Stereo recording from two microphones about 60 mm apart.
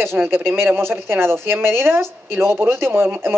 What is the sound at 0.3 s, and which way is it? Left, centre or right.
A woman's voice, right.